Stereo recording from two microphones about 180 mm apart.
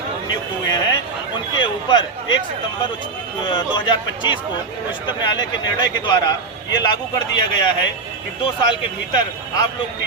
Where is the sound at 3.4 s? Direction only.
25° left (ahead or behind).